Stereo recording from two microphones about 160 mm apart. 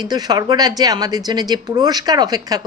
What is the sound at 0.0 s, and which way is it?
Speech, 25° right (ahead or behind).